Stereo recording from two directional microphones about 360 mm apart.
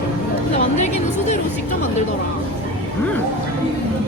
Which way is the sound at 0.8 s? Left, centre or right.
Centre.